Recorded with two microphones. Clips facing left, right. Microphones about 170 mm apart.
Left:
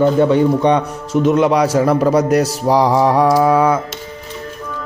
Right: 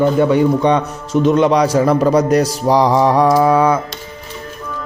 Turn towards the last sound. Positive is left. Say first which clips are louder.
# even
turn(degrees=5)  # may be behind; listen again after turning